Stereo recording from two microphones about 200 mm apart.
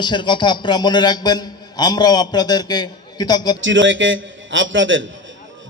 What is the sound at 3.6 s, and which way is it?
A man's voice, 70° right (ahead or behind).